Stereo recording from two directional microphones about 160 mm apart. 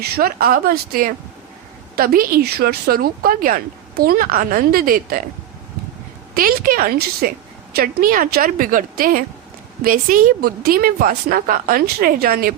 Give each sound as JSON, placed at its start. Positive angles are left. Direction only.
{"t": 0.0, "sound": "a woman's voice", "side_deg": -65}
{"t": 6.3, "sound": "a woman's voice", "side_deg": -60}